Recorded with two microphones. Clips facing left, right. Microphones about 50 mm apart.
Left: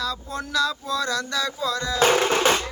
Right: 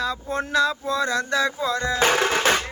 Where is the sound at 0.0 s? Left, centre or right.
Right.